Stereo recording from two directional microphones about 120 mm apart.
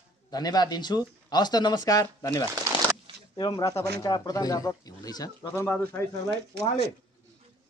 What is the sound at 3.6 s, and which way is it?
A man's voice, 30° left (ahead or behind).